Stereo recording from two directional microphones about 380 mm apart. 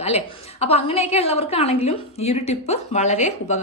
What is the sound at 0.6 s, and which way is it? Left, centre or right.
A woman's voice, centre.